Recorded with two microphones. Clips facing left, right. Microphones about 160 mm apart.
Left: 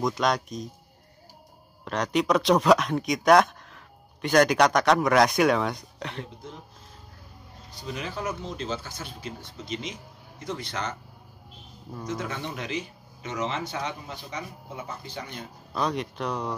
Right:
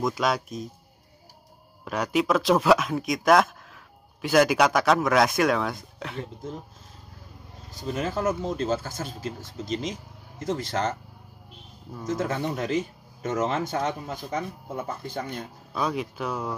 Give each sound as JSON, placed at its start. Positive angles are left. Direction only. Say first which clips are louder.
{"t": 0.0, "sound": "speech", "louder": "even", "side_deg": -5}
{"t": 1.9, "sound": "speech", "louder": "even", "side_deg": -5}
{"t": 7.8, "sound": "speech", "louder": "right 6 dB", "side_deg": -45}
{"t": 12.1, "sound": "speech", "louder": "right 6 dB", "side_deg": -45}
{"t": 15.7, "sound": "speech", "louder": "even", "side_deg": -5}